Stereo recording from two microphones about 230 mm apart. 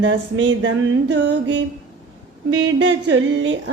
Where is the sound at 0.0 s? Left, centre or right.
Right.